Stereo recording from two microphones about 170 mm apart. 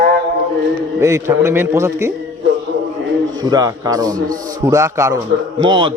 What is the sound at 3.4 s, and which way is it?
A man's voice, 20° right (ahead or behind).